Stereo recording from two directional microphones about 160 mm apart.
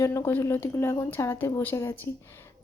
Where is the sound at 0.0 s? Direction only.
15° left (ahead or behind).